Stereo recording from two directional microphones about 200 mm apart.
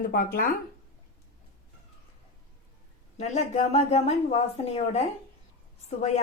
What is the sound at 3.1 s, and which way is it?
A woman's voice, 35° left (ahead or behind).